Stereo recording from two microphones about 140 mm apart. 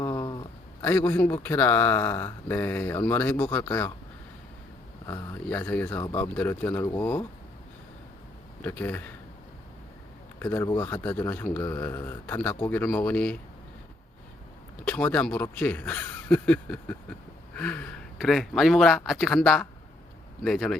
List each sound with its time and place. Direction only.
0.0 s a sound: 25° left (ahead or behind)
0.8 s speech: 10° left (ahead or behind)
5.0 s speech: 25° left (ahead or behind)
5.5 s speech: 10° left (ahead or behind)
5.9 s speech: 25° left (ahead or behind)
6.1 s speech: 15° left (ahead or behind)
8.6 s speech: 15° left (ahead or behind)
10.4 s speech: 15° left (ahead or behind)
14.8 s speech: 10° left (ahead or behind)
18.2 s speech: centre (ahead or behind)